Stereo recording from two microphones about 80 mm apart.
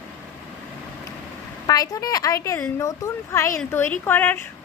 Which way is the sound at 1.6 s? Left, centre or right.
Left.